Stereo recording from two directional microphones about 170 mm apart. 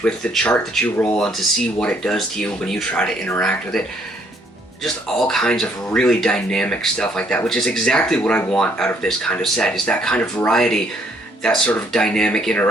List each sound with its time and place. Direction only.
0.0 s speech: 10° left (ahead or behind)
5.3 s speech: 5° left (ahead or behind)